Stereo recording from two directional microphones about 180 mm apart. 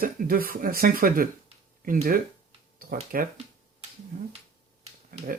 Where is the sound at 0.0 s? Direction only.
55° right (ahead or behind).